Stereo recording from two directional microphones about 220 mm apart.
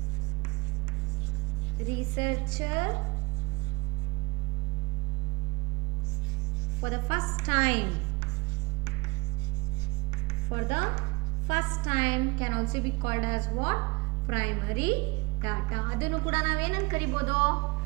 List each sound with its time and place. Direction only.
2.1 s a woman's voice: 10° right (ahead or behind)
6.8 s a woman's voice: 15° right (ahead or behind)
10.5 s a woman's voice: 15° right (ahead or behind)